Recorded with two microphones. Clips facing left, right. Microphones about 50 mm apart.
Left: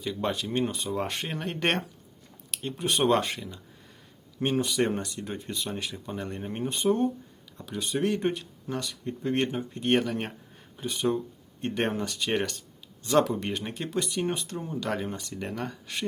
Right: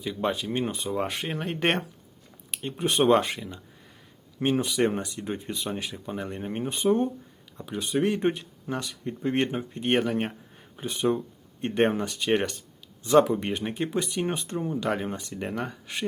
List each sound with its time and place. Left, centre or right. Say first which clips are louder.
0.0 s speech: right 2 dB; centre
12.3 s a sound: right 6 dB; centre
13.1 s speech: right 4 dB; centre